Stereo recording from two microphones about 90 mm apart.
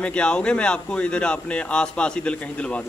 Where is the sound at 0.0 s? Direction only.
10° left (ahead or behind).